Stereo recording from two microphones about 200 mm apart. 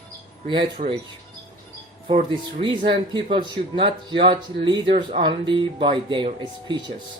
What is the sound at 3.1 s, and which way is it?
Speech, 25° right (ahead or behind).